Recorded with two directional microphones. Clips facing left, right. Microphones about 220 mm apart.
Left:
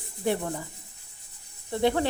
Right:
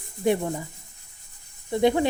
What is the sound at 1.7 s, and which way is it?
Speech, 15° right (ahead or behind).